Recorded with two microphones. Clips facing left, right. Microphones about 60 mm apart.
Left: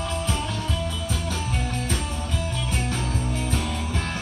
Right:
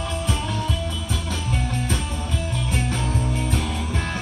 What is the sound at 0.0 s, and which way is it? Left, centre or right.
Music, centre.